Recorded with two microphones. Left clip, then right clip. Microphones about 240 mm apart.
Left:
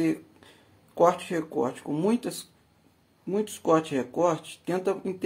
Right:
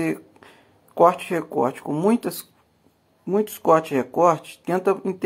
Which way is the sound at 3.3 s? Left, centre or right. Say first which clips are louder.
Right 6 dB; centre.